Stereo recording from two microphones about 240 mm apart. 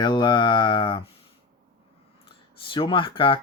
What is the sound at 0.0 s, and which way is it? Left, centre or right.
Speech, centre.